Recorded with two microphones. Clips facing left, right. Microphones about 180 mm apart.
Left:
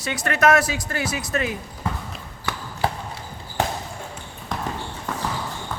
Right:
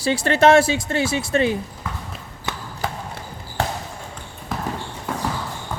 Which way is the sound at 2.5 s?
20° right (ahead or behind).